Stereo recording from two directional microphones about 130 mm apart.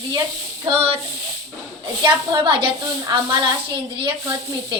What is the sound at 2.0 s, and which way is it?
A woman's voice, 35° right (ahead or behind).